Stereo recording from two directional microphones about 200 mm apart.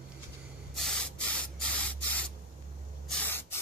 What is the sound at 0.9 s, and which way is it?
Spray, 5° left (ahead or behind).